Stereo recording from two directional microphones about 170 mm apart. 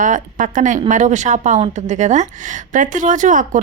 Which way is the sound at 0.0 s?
50° right (ahead or behind).